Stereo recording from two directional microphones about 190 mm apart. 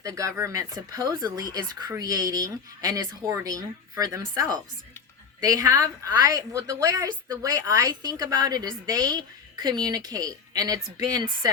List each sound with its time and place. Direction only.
0.0 s a woman's voice: 15° right (ahead or behind)